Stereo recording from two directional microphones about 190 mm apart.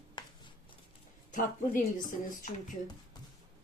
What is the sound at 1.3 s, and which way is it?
Speech, 45° left (ahead or behind).